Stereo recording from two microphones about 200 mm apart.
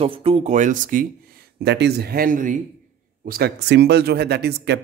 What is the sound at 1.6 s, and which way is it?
Speech, 55° right (ahead or behind).